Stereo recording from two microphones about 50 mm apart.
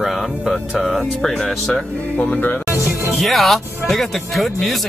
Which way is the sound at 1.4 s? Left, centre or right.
Centre.